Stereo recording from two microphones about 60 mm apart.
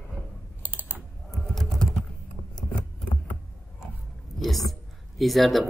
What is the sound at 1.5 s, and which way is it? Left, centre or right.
Typing, centre.